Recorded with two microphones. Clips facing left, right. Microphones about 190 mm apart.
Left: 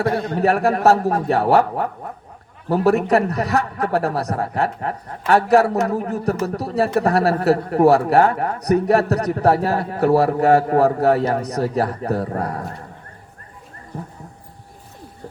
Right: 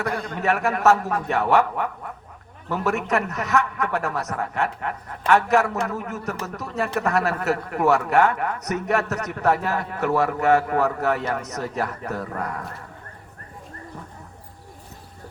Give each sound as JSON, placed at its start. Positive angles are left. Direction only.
{"t": 0.0, "sound": "a man's voice", "side_deg": 40}